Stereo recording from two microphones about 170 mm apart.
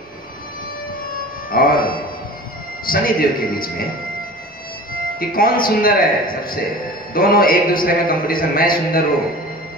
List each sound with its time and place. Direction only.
1.5 s music: 60° left (ahead or behind)
2.8 s a man's voice: 60° left (ahead or behind)
5.2 s a man's voice: 60° left (ahead or behind)